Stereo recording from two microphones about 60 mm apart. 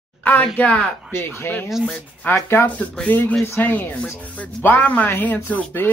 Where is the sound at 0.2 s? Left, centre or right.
Left.